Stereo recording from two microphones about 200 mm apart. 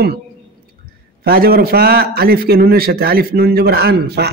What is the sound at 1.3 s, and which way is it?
Speech, 50° right (ahead or behind).